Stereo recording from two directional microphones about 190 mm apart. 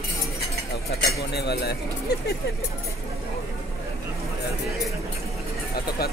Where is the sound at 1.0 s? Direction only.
60° left (ahead or behind).